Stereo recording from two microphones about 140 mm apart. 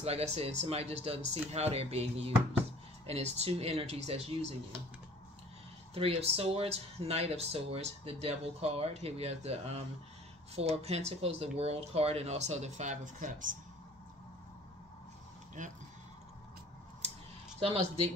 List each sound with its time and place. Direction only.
0.0 s speech: 50° right (ahead or behind)
5.9 s speech: 45° right (ahead or behind)
15.6 s speech: 65° right (ahead or behind)
17.6 s speech: 45° right (ahead or behind)